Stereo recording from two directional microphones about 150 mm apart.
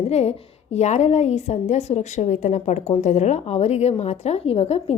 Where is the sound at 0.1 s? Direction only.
45° left (ahead or behind).